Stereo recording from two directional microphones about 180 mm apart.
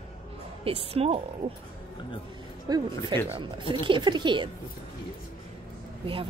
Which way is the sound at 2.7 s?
20° right (ahead or behind).